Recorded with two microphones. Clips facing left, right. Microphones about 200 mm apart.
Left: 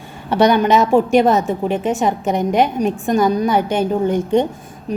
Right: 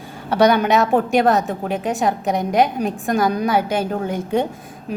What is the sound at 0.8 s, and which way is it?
A woman's voice, centre (ahead or behind).